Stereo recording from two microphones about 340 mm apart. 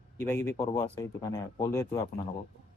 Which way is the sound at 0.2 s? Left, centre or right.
Centre.